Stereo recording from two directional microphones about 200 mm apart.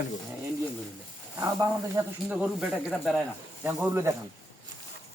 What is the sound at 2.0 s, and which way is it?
Speech, 15° right (ahead or behind).